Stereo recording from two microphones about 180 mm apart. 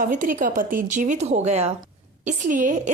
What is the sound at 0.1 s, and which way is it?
A woman's voice, 45° right (ahead or behind).